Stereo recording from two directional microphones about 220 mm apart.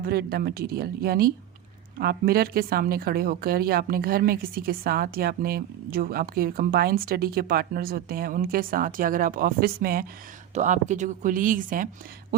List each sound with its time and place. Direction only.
0.0 s a woman's voice: 45° right (ahead or behind)